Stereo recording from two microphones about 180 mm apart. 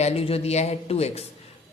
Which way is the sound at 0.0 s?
35° left (ahead or behind).